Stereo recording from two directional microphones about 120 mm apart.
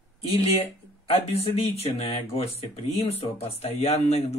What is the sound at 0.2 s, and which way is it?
Speech, 55° left (ahead or behind).